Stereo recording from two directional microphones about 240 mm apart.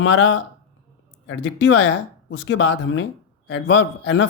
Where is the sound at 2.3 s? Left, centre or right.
Left.